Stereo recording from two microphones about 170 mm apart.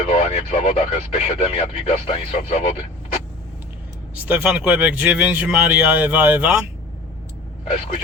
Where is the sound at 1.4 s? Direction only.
35° left (ahead or behind).